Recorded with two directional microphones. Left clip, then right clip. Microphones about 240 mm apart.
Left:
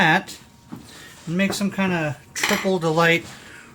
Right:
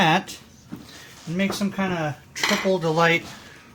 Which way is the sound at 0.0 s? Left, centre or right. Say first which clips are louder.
Left 2 dB; centre.